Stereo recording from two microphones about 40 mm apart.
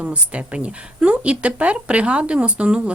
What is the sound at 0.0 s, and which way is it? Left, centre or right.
Speech, right.